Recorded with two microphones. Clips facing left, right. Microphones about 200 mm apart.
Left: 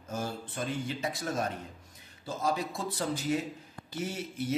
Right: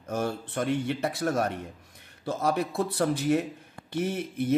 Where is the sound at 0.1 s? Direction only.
65° right (ahead or behind).